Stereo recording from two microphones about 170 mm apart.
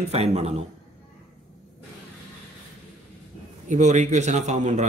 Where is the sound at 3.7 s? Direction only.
45° right (ahead or behind).